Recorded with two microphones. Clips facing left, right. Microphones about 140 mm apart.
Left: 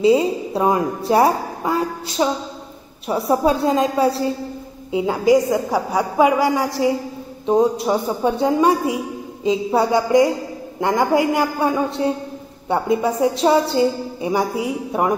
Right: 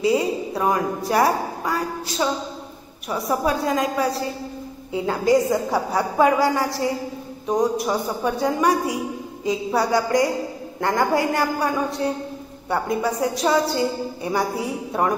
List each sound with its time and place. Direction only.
0.0 s a woman's voice: 25° left (ahead or behind)
4.9 s a woman's voice: 15° left (ahead or behind)